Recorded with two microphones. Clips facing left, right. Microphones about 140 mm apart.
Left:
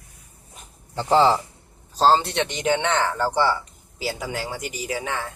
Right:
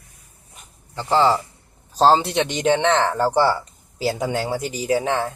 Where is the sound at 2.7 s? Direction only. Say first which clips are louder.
Right 4 dB; 30° right (ahead or behind).